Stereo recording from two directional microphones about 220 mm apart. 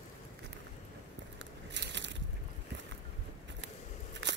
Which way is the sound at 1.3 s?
55° right (ahead or behind).